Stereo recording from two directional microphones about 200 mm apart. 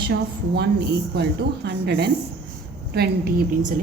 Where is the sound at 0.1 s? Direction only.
55° right (ahead or behind).